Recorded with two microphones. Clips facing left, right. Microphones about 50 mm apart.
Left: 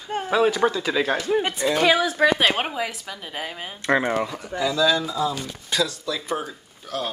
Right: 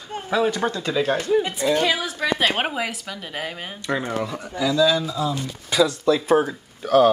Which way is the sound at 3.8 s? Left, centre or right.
Left.